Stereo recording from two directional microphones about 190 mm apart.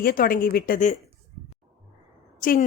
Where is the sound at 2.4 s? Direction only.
45° left (ahead or behind).